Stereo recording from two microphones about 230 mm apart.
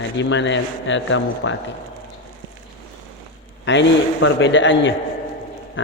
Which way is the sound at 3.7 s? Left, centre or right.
Left.